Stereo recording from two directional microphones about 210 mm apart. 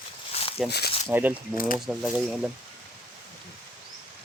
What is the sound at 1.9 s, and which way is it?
Speech, 5° right (ahead or behind).